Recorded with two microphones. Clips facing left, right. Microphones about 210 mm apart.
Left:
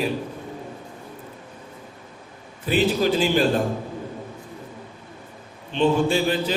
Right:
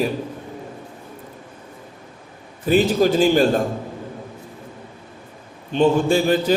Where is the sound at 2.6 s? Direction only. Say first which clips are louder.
Right 4 dB; 45° right (ahead or behind).